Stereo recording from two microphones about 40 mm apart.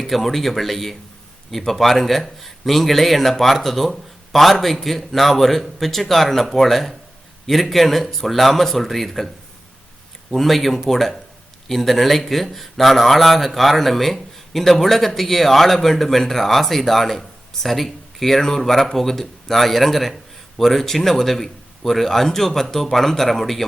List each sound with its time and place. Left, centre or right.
0.0 s speech: centre
10.3 s speech: centre